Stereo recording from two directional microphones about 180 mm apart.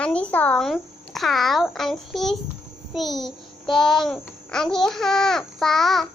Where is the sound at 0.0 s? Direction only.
5° left (ahead or behind).